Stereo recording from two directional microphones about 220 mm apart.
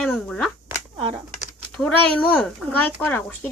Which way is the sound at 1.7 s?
5° left (ahead or behind).